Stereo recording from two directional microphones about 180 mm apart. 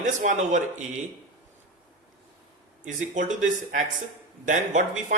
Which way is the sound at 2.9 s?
45° right (ahead or behind).